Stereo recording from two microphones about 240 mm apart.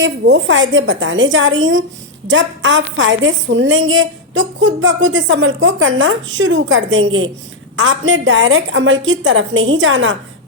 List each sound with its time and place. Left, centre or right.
0.0 s a woman's voice: right